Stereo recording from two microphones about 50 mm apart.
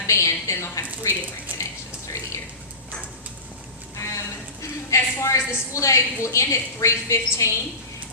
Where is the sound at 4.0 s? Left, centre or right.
Left.